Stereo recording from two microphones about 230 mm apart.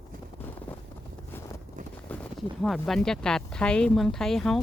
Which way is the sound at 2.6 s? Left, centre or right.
Centre.